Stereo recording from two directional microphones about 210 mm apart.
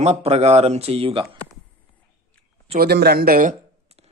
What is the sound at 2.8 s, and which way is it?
Speech, 50° right (ahead or behind).